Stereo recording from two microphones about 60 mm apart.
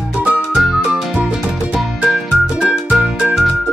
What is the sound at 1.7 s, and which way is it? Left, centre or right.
Music, centre.